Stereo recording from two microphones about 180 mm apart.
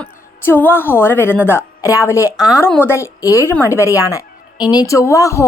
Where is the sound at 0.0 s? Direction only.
10° left (ahead or behind).